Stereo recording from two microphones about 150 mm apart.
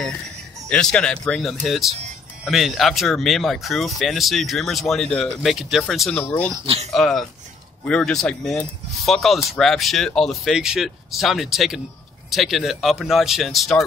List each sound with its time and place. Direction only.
0.7 s speech: 5° left (ahead or behind)
6.1 s speech: 10° left (ahead or behind)
6.6 s speech: 40° right (ahead or behind)
6.9 s speech: 5° left (ahead or behind)